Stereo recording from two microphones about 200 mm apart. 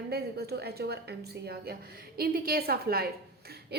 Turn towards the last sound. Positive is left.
turn(degrees=-50)  # may be behind; listen again after turning